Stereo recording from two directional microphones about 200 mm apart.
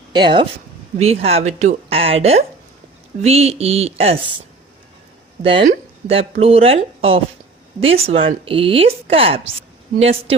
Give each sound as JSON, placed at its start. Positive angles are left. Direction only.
{"t": 0.1, "sound": "a woman's voice", "side_deg": -25}